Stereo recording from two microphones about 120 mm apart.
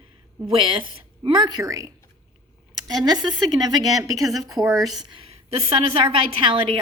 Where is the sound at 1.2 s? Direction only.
40° right (ahead or behind).